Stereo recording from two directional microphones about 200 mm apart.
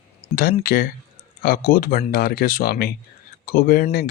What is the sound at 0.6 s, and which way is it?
Speech, 45° left (ahead or behind).